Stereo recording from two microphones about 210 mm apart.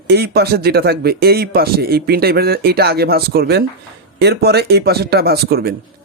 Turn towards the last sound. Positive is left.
turn(degrees=-50)  # may be behind; listen again after turning